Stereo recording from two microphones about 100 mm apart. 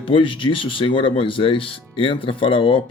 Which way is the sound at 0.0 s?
60° left (ahead or behind).